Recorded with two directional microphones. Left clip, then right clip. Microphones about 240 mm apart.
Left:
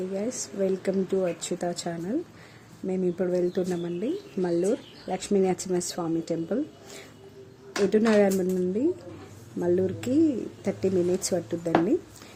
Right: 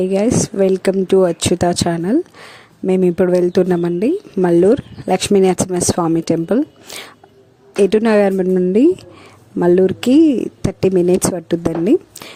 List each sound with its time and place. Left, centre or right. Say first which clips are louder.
0.1 s speech: right 16 dB; right
7.9 s speech: right 8 dB; right